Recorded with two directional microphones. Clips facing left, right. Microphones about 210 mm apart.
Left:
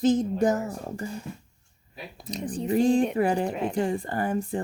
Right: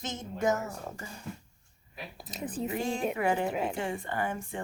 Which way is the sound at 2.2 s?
5° right (ahead or behind).